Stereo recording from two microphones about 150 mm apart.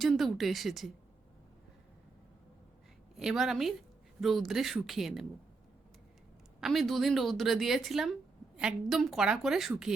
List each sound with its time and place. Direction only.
0.0 s speech: centre (ahead or behind)
3.2 s speech: 5° right (ahead or behind)
6.6 s speech: centre (ahead or behind)